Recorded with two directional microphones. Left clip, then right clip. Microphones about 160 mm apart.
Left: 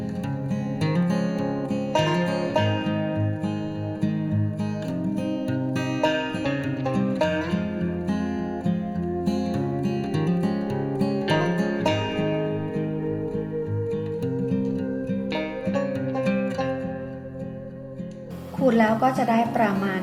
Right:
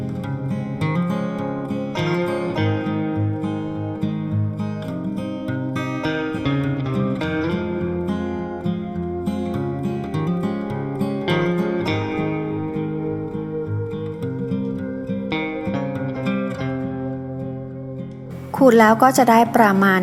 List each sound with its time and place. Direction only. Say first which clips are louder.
18.6 s a woman's voice: right 8 dB; 55° right (ahead or behind)